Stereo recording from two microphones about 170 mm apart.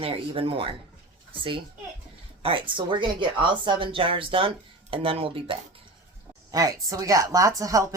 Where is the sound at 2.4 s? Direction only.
30° right (ahead or behind).